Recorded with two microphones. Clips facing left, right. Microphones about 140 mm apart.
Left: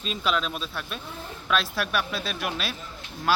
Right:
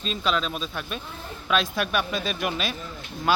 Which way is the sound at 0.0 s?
5° left (ahead or behind).